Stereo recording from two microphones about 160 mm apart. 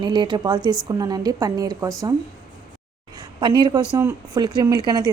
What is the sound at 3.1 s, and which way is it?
A woman's voice, 25° right (ahead or behind).